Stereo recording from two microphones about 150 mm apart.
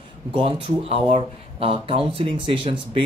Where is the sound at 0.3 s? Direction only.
35° right (ahead or behind).